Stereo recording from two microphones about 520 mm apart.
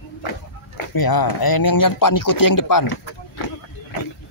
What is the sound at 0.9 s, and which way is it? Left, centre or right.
Speech, left.